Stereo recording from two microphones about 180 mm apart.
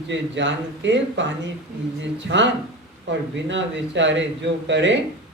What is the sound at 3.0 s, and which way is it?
Speech, 90° right.